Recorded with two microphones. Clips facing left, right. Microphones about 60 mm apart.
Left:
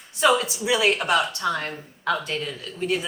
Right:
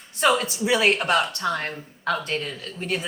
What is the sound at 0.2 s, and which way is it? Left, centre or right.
Speech, right.